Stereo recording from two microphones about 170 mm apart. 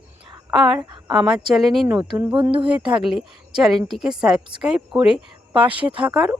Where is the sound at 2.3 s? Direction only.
30° right (ahead or behind).